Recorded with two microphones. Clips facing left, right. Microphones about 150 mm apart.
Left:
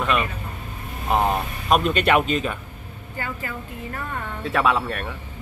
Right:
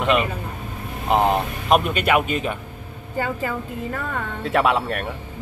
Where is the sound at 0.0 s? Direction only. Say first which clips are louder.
Right 3 dB; 30° right (ahead or behind).